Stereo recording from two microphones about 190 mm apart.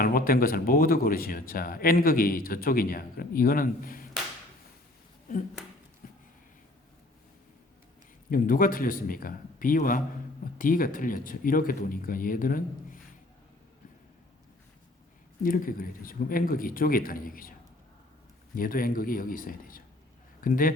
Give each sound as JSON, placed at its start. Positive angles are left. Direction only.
{"t": 0.0, "sound": "speech", "side_deg": 50}
{"t": 6.0, "sound": "a sound", "side_deg": 45}
{"t": 8.3, "sound": "speech", "side_deg": 50}
{"t": 15.4, "sound": "speech", "side_deg": 45}
{"t": 18.5, "sound": "speech", "side_deg": 50}